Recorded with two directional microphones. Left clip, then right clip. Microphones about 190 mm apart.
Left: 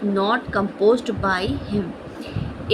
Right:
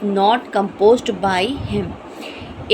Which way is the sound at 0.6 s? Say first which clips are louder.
Right 3 dB; 35° right (ahead or behind).